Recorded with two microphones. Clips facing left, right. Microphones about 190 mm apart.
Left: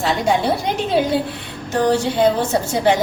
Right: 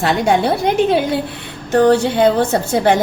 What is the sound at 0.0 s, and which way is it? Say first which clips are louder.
Speech: right 3 dB; 60° right (ahead or behind).